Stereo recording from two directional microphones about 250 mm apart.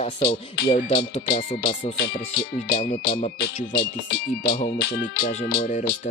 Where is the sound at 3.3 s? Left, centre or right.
Left.